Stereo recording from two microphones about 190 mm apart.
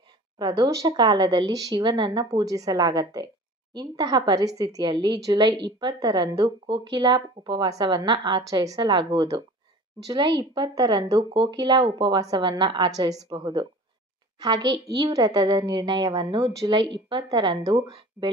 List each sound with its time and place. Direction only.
0.4 s a woman's voice: 20° right (ahead or behind)
15.0 s a woman's voice: 20° right (ahead or behind)